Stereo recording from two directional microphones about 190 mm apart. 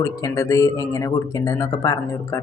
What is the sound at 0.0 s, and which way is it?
Speech, 15° left (ahead or behind).